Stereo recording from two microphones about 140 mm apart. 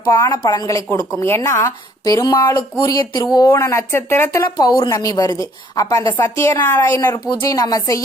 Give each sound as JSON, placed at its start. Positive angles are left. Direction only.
{"t": 0.2, "sound": "speech", "side_deg": 30}
{"t": 7.3, "sound": "speech", "side_deg": 25}